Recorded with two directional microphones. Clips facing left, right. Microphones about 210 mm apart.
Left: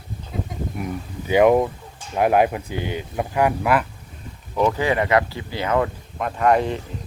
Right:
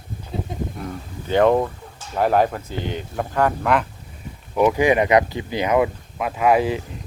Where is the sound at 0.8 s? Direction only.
10° left (ahead or behind).